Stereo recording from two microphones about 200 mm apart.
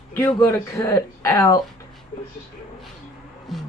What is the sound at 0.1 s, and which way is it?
Speech, 10° left (ahead or behind).